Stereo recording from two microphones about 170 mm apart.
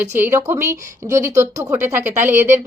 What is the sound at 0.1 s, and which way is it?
A woman's voice, 15° right (ahead or behind).